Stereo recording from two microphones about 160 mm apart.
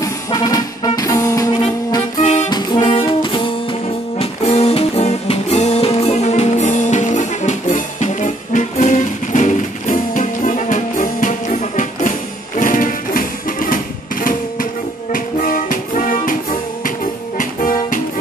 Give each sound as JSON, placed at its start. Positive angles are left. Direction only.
{"t": 0.0, "sound": "music", "side_deg": 20}
{"t": 15.1, "sound": "music", "side_deg": 60}
{"t": 17.4, "sound": "music", "side_deg": 55}